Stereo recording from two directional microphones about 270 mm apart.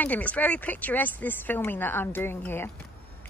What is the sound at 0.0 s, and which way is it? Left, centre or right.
Speech, centre.